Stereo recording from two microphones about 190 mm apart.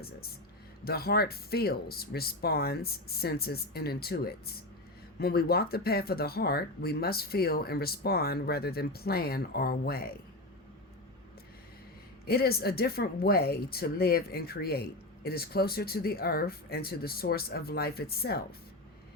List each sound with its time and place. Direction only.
0.9 s speech: 55° left (ahead or behind)
12.2 s speech: 55° left (ahead or behind)